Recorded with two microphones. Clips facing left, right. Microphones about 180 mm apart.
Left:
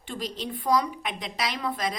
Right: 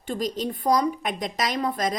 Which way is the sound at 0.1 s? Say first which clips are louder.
Right 6 dB; 45° right (ahead or behind).